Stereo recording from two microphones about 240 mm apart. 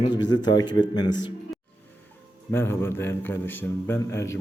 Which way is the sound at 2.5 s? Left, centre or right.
Centre.